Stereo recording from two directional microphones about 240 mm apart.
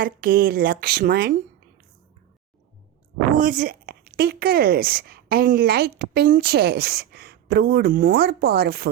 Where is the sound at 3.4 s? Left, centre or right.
Right.